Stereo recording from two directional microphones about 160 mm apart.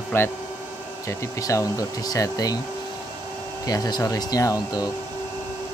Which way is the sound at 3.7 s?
25° left (ahead or behind).